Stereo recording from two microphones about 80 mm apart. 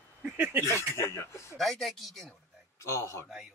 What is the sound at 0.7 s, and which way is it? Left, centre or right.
Speech, left.